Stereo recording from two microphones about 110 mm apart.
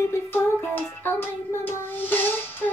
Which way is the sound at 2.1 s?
20° left (ahead or behind).